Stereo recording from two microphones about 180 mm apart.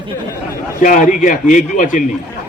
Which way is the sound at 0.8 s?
50° left (ahead or behind).